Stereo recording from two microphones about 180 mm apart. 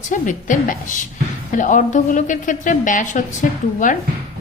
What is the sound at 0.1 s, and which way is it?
A woman's voice, 45° left (ahead or behind).